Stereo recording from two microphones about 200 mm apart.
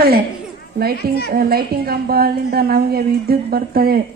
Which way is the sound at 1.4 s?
50° right (ahead or behind).